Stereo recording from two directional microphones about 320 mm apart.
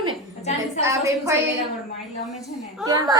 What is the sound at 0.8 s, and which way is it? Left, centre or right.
A woman's voice, centre.